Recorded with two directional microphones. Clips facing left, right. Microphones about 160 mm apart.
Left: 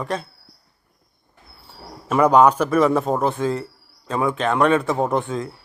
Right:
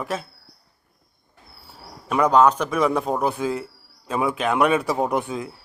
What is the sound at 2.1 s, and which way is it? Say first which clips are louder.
A man's voice: left 2 dB; 5° left (ahead or behind).